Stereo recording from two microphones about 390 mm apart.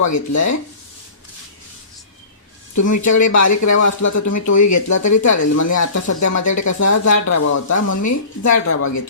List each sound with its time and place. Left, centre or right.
0.0 s speech: left
2.7 s speech: left